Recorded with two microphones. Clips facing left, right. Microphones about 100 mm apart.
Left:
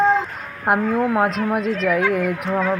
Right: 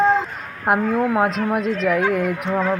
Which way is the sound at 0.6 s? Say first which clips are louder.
Even; centre (ahead or behind).